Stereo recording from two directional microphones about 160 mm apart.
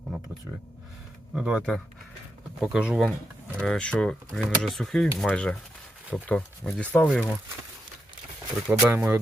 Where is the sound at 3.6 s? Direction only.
5° left (ahead or behind).